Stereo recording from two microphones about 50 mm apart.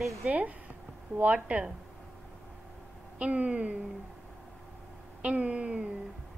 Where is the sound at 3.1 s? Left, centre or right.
Right.